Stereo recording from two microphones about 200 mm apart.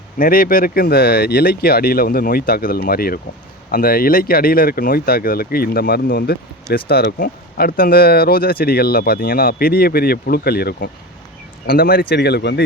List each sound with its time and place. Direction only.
0.2 s speech: 45° left (ahead or behind)